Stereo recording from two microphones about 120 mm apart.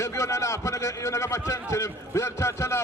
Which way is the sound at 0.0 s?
25° left (ahead or behind).